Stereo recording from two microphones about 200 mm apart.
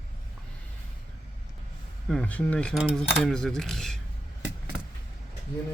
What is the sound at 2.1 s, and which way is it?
Speech, 5° left (ahead or behind).